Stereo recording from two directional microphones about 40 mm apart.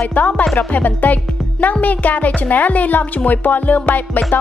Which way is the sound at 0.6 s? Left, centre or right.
Left.